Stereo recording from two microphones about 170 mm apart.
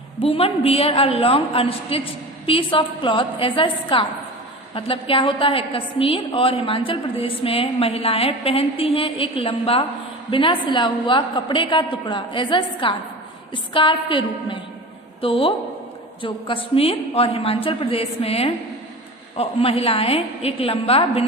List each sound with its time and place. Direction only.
0.2 s a woman's voice: 35° left (ahead or behind)